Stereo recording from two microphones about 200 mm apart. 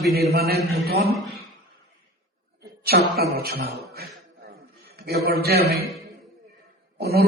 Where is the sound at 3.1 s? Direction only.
50° right (ahead or behind).